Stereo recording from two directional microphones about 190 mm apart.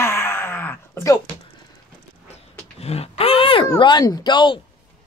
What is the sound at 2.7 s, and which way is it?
Speech, 30° left (ahead or behind).